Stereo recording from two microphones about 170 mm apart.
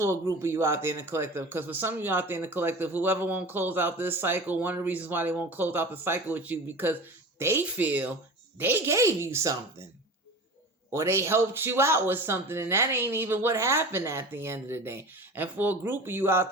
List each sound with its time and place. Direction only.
0.0 s speech: 15° right (ahead or behind)
10.9 s speech: 15° right (ahead or behind)